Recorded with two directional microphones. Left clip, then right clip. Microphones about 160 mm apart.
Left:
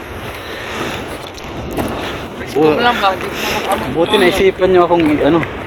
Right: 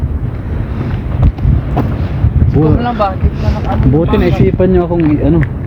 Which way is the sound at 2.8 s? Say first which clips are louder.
Left 2 dB; 90° right.